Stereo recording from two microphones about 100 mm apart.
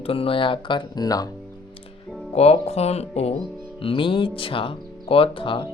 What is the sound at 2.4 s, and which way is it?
Speech, 90° left.